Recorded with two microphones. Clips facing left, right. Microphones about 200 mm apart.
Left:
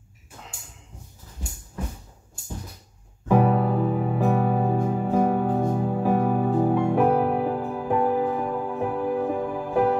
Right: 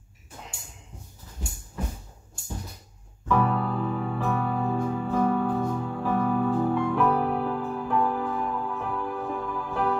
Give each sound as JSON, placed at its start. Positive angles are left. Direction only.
{"t": 3.3, "sound": "music", "side_deg": 45}